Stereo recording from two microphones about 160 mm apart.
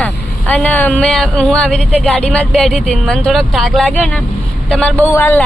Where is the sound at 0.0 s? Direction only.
10° left (ahead or behind).